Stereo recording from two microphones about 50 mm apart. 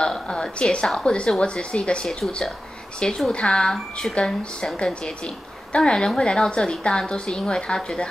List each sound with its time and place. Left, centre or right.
0.0 s a woman's voice: centre